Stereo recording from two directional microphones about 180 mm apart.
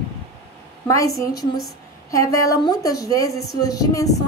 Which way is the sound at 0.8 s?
15° left (ahead or behind).